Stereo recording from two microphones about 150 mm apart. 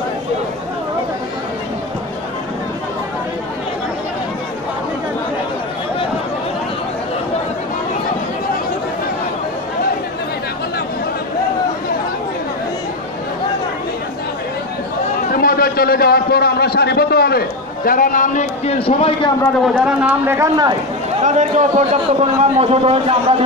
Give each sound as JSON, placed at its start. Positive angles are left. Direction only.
{"t": 15.3, "sound": "a man's voice", "side_deg": 85}
{"t": 18.8, "sound": "a man's voice", "side_deg": 40}
{"t": 19.6, "sound": "a man's voice", "side_deg": -10}
{"t": 21.2, "sound": "a man's voice", "side_deg": -55}